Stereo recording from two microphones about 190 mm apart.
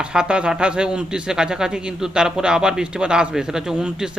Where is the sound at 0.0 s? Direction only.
5° right (ahead or behind).